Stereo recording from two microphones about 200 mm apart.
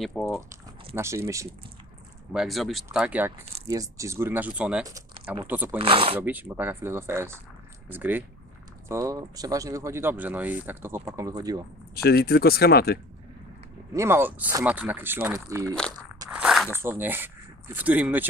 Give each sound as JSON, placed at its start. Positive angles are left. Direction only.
{"t": 0.0, "sound": "speech", "side_deg": 0}
{"t": 0.9, "sound": "speech", "side_deg": -15}
{"t": 2.3, "sound": "speech", "side_deg": 0}
{"t": 4.8, "sound": "a sound", "side_deg": -15}
{"t": 5.4, "sound": "speech", "side_deg": -10}
{"t": 5.8, "sound": "speech", "side_deg": -25}
{"t": 6.1, "sound": "speech", "side_deg": -10}
{"t": 11.9, "sound": "speech", "side_deg": 50}
{"t": 13.9, "sound": "speech", "side_deg": -10}
{"t": 16.3, "sound": "a sound", "side_deg": -5}
{"t": 16.7, "sound": "speech", "side_deg": -10}